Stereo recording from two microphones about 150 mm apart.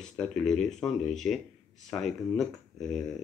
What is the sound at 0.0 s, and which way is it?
Speech, 5° left (ahead or behind).